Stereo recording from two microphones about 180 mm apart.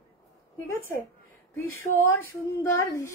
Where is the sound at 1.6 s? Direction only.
10° left (ahead or behind).